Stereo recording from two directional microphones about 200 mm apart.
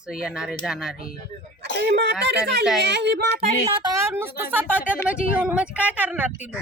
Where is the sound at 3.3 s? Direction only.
20° right (ahead or behind).